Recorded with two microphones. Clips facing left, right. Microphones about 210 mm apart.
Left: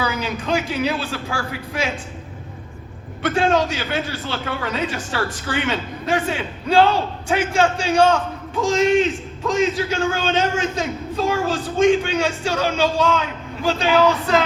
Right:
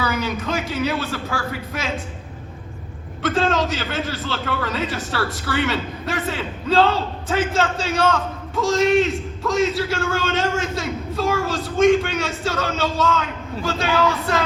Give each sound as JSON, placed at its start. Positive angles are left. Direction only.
{"t": 0.0, "sound": "a man's voice", "side_deg": 15}
{"t": 3.2, "sound": "a man's voice", "side_deg": 15}